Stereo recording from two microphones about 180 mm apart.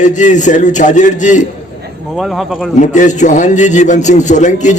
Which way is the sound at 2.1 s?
Centre (ahead or behind).